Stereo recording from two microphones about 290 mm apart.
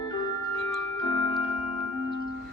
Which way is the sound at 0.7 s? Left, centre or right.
Centre.